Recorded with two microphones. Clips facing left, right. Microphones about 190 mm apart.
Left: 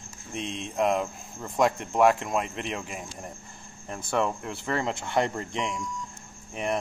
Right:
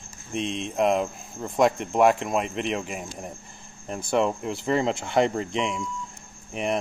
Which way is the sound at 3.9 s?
25° right (ahead or behind).